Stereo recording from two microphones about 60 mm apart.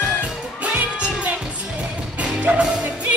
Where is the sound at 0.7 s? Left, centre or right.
Right.